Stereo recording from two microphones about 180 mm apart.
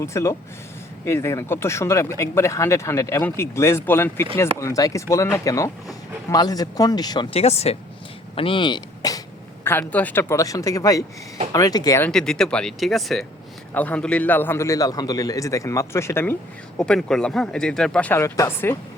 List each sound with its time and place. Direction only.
0.0 s speech: 15° left (ahead or behind)
7.3 s speech: 35° left (ahead or behind); by 12.1 s 15° left (ahead or behind)
12.1 s speech: 5° left (ahead or behind)
16.7 s speech: 5° left (ahead or behind)